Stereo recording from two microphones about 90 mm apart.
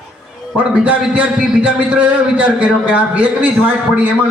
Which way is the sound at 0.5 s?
15° right (ahead or behind).